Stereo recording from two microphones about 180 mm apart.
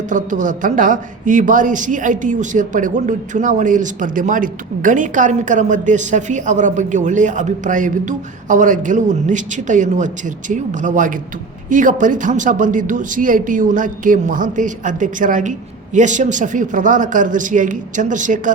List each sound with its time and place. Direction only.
0.1 s a woman's voice: 45° right (ahead or behind)